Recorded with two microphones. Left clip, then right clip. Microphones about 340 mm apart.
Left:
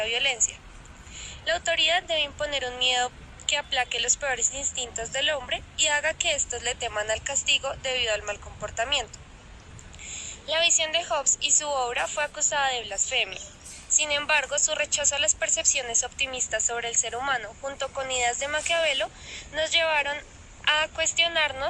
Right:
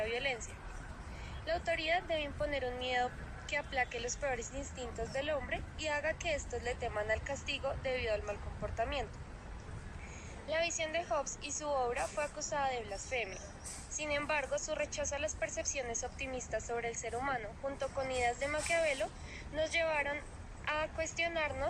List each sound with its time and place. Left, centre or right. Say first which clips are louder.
0.0 s vehicle: left 11 dB; left
1.5 s speech: left 11 dB; left
10.5 s speech: left 11 dB; left